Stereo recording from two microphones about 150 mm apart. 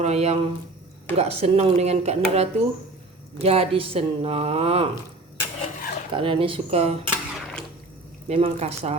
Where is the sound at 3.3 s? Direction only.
40° right (ahead or behind).